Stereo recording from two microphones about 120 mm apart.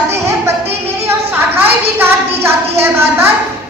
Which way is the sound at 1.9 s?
20° right (ahead or behind).